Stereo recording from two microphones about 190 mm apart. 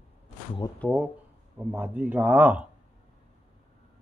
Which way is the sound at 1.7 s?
10° right (ahead or behind).